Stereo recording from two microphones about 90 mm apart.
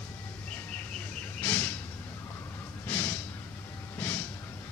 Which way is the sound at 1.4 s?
20° left (ahead or behind).